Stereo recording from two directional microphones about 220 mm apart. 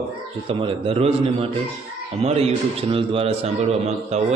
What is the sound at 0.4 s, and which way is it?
Speech, 25° right (ahead or behind).